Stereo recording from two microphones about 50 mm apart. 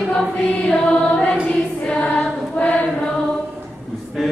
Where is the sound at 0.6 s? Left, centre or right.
Centre.